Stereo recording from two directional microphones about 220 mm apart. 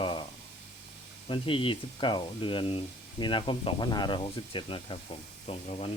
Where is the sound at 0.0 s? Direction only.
20° left (ahead or behind).